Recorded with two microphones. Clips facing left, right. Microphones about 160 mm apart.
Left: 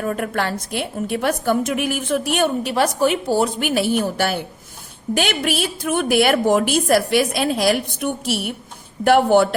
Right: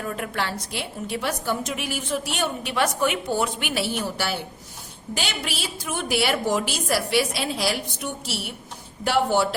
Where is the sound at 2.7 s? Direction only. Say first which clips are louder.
Left 2 dB; 35° left (ahead or behind).